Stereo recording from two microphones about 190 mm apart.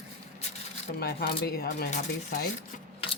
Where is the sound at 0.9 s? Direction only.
55° left (ahead or behind).